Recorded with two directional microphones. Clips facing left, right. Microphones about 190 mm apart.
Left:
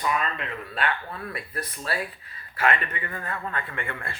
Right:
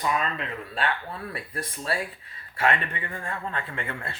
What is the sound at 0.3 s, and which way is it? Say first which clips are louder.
A man's voice: even; 30° right (ahead or behind).